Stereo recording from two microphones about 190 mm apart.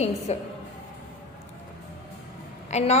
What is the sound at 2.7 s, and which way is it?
Speech, 35° left (ahead or behind).